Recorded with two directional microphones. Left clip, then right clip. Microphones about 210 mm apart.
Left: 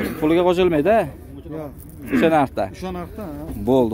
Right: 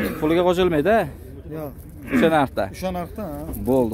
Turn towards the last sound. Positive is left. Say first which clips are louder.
# left 2 dB
turn(degrees=10)  # may be behind; listen again after turning